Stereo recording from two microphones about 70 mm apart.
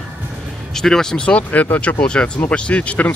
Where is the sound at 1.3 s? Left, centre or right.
Left.